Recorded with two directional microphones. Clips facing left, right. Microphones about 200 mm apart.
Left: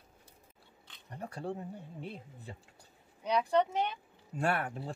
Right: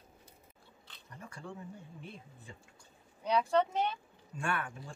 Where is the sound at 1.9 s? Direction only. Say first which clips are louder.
Left 5 dB; 65° left (ahead or behind).